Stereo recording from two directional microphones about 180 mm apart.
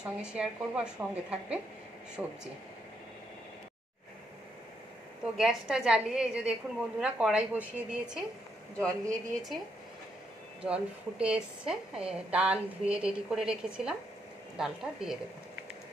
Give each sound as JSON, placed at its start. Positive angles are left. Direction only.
{"t": 0.0, "sound": "a woman's voice", "side_deg": -5}
{"t": 5.2, "sound": "a woman's voice", "side_deg": -5}
{"t": 8.7, "sound": "a woman's voice", "side_deg": 5}
{"t": 10.6, "sound": "a woman's voice", "side_deg": -5}